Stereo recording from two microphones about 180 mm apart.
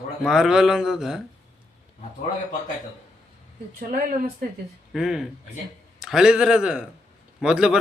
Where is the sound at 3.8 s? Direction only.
50° right (ahead or behind).